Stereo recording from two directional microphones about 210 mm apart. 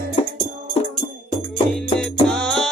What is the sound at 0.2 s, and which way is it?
Music, 25° left (ahead or behind).